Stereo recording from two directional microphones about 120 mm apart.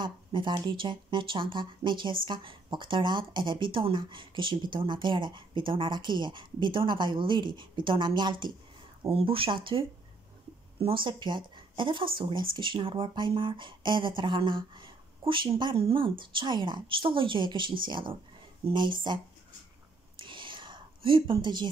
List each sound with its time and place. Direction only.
0.0 s speech: 40° right (ahead or behind)
20.2 s whispering: 45° right (ahead or behind)